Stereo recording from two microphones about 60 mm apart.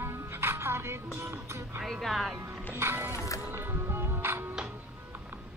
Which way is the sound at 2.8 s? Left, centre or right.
Right.